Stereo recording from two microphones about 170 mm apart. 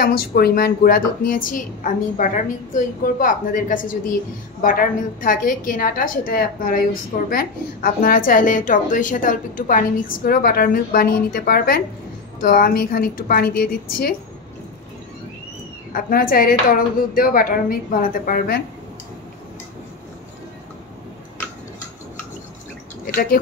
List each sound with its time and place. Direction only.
0.0 s a woman's voice: 60° left (ahead or behind)
15.9 s a woman's voice: 60° left (ahead or behind)